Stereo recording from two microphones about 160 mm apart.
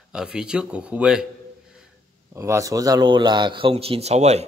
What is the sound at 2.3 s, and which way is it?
A man's voice, 15° right (ahead or behind).